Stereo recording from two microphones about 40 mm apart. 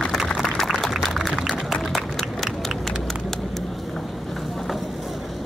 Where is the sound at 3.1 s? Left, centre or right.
Centre.